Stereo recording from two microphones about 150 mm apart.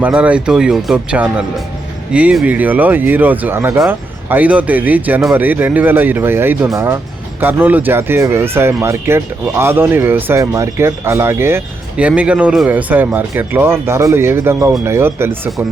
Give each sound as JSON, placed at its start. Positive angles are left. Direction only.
{"t": 0.0, "sound": "speech", "side_deg": -10}